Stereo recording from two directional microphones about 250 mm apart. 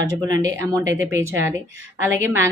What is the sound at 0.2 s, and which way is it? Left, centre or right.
Speech, centre.